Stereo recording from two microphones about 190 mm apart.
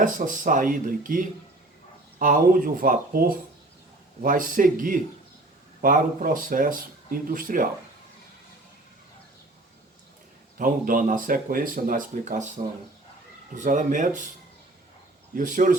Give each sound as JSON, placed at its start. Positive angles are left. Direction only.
{"t": 0.0, "sound": "speech", "side_deg": -45}
{"t": 10.6, "sound": "speech", "side_deg": -45}
{"t": 15.4, "sound": "speech", "side_deg": -45}